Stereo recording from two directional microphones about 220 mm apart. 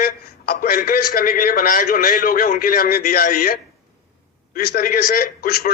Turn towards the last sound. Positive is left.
turn(degrees=45)  # may be behind; listen again after turning